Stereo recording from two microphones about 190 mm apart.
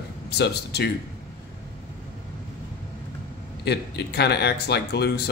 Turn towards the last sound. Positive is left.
turn(degrees=60)  # may be behind; listen again after turning